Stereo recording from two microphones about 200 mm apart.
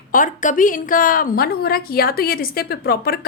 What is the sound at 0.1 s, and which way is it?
A woman's voice, 40° left (ahead or behind).